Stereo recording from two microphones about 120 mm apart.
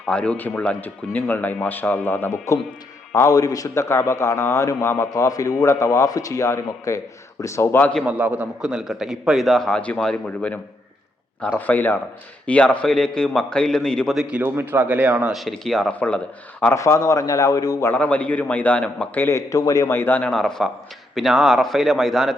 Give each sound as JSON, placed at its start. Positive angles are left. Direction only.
{"t": 0.0, "sound": "speech", "side_deg": 10}
{"t": 3.2, "sound": "a man's voice", "side_deg": 30}
{"t": 8.0, "sound": "a man's voice", "side_deg": -10}
{"t": 14.2, "sound": "speech", "side_deg": -10}
{"t": 15.3, "sound": "a man's voice", "side_deg": 0}
{"t": 16.7, "sound": "a man's voice", "side_deg": 25}
{"t": 19.2, "sound": "a man's voice", "side_deg": 25}
{"t": 20.0, "sound": "a man's voice", "side_deg": 15}